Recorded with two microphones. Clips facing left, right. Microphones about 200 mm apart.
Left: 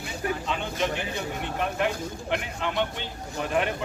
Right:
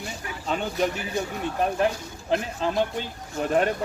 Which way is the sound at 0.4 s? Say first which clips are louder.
Right 3 dB; 40° right (ahead or behind).